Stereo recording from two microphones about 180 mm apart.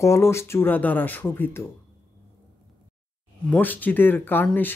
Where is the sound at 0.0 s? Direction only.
15° left (ahead or behind).